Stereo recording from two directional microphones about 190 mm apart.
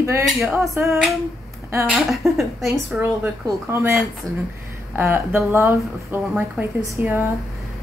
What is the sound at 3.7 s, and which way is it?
Speech, 15° right (ahead or behind).